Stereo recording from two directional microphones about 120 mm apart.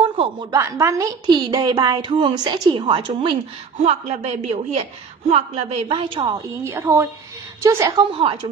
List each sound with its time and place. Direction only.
0.0 s a sound: 50° right (ahead or behind)
0.5 s a woman's voice: 25° right (ahead or behind); by 3.3 s 45° right (ahead or behind)
3.8 s a woman's voice: 60° right (ahead or behind); by 6.3 s 45° right (ahead or behind)
6.3 s a woman's voice: 25° right (ahead or behind)
8.1 s a woman's voice: 45° right (ahead or behind)